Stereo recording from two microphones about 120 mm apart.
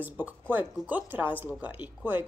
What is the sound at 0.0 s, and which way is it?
Speech, 15° right (ahead or behind).